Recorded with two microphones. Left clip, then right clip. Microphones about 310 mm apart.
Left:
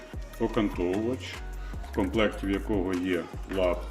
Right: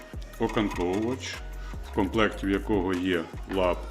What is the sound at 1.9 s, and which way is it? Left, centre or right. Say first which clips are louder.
Speech: right 1 dB; right.